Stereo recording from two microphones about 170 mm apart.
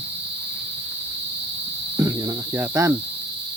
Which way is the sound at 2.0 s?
20° right (ahead or behind).